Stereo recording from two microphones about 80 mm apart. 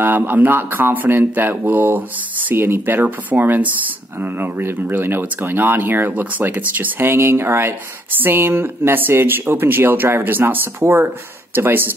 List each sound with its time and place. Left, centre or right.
0.0 s speech: right